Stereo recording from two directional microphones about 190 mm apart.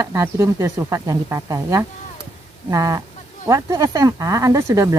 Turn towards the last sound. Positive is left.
turn(degrees=-15)  # may be behind; listen again after turning